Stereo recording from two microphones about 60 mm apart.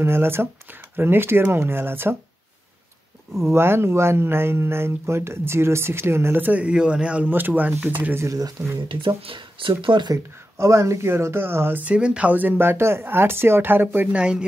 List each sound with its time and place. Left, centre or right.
0.0 s speech: right
3.5 s speech: right
7.2 s speech: right
8.2 s speech: right
10.1 s speech: right
11.8 s speech: right
14.1 s speech: centre